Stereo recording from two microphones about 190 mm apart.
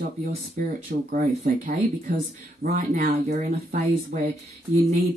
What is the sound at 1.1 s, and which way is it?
Speech, 45° right (ahead or behind).